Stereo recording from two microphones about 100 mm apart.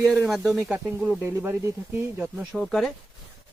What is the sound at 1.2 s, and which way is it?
Speech, 20° right (ahead or behind).